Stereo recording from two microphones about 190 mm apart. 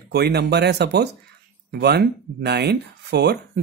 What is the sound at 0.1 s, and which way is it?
Speech, 60° right (ahead or behind).